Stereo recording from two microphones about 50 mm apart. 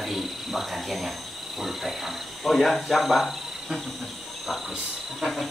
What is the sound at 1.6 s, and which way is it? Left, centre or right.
Cricket, centre.